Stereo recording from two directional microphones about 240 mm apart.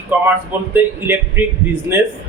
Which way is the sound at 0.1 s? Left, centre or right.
Centre.